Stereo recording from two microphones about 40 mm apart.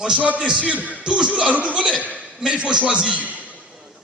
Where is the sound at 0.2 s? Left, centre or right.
Right.